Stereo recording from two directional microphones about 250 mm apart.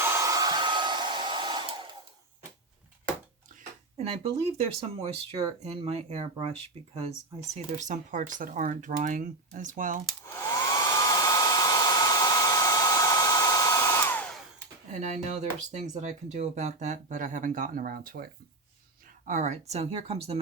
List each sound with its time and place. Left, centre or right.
0.0 s hair dryer: centre
3.5 s a sound: right
4.5 s speech: right
7.5 s speech: right
10.2 s hair dryer: centre
15.0 s speech: right
19.3 s speech: right